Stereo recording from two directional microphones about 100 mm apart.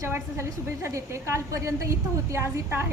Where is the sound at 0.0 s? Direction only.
25° right (ahead or behind).